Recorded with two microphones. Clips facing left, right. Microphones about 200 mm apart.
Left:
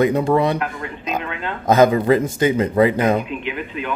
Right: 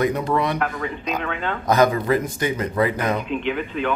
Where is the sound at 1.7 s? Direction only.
25° left (ahead or behind).